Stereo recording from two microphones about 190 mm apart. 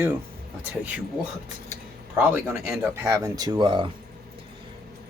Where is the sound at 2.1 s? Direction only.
10° right (ahead or behind).